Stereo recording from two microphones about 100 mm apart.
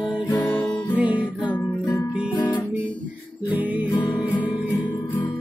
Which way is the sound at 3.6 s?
15° right (ahead or behind).